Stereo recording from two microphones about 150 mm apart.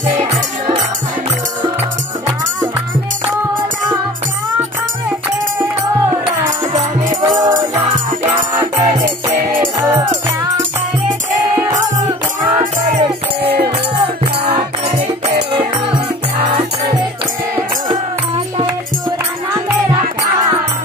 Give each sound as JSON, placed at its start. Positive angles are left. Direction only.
{"t": 5.6, "sound": "music", "side_deg": -10}
{"t": 7.2, "sound": "music", "side_deg": -25}
{"t": 8.7, "sound": "music", "side_deg": -55}
{"t": 9.8, "sound": "music", "side_deg": -20}
{"t": 12.5, "sound": "music", "side_deg": -50}
{"t": 13.4, "sound": "music", "side_deg": -90}